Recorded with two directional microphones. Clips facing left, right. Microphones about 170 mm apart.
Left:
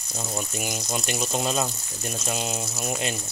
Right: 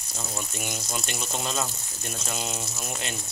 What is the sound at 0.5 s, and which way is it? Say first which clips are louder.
Speech: left 4 dB; 15° left (ahead or behind).